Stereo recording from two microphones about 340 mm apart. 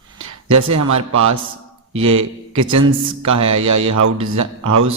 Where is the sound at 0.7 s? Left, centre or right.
Right.